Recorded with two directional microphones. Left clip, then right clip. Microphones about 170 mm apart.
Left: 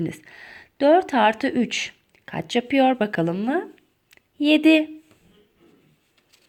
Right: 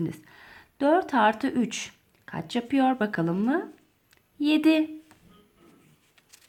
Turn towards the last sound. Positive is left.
turn(degrees=25)  # may be behind; listen again after turning